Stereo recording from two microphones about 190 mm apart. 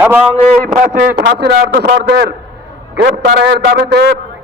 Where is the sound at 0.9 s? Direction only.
50° right (ahead or behind).